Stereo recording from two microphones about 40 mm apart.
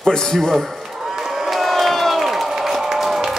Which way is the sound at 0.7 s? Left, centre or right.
Centre.